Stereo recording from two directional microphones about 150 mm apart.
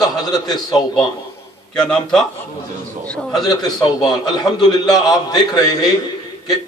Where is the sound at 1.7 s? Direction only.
5° left (ahead or behind).